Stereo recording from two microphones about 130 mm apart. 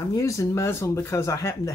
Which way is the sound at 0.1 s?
25° left (ahead or behind).